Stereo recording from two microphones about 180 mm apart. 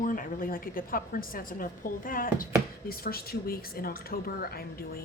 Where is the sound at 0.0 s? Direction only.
50° left (ahead or behind).